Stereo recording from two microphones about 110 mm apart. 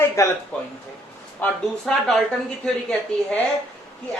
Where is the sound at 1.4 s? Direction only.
15° left (ahead or behind).